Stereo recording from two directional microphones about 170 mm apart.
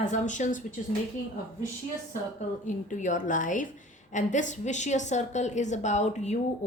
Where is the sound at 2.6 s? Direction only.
50° left (ahead or behind).